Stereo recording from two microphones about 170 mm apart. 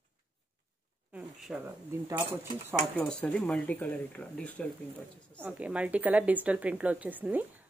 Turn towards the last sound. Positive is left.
turn(degrees=-10)  # may be behind; listen again after turning